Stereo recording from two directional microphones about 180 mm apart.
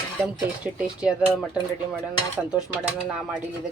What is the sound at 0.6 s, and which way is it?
Speech, 5° right (ahead or behind).